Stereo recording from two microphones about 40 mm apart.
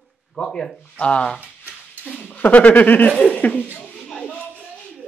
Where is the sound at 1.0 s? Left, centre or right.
Left.